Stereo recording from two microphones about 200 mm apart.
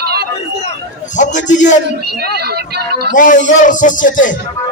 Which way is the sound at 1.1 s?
40° left (ahead or behind).